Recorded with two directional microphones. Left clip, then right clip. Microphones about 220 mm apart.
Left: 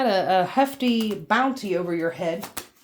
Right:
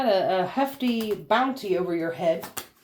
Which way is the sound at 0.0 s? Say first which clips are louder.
Left 2 dB; 45° left (ahead or behind).